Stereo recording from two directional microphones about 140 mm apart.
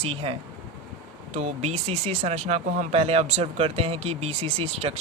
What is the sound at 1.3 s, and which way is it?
Speech, 50° right (ahead or behind).